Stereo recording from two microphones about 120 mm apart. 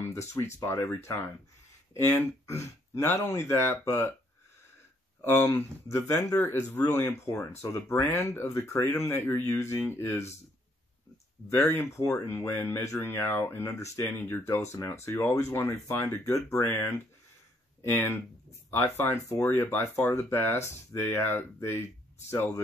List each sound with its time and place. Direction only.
0.3 s speech: 25° left (ahead or behind)
5.2 s speech: 20° left (ahead or behind)
11.4 s speech: 20° left (ahead or behind)